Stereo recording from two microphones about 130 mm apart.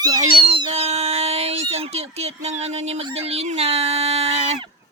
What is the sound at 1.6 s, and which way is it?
Speech, 50° right (ahead or behind).